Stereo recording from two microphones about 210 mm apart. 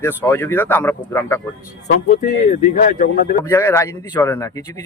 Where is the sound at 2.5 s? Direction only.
35° left (ahead or behind).